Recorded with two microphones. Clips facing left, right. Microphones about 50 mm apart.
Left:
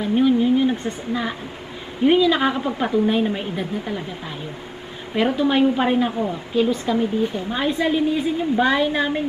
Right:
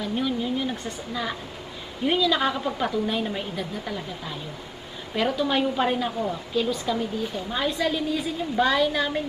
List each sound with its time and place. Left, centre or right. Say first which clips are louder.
0.0 s a sound: left 9 dB; left
2.0 s a woman's voice: left 6 dB; left
5.1 s a woman's voice: left 5 dB; left